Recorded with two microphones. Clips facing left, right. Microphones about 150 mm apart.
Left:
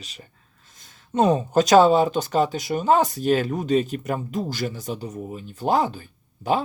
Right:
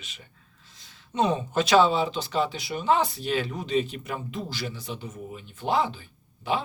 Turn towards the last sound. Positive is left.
turn(degrees=45)  # may be behind; listen again after turning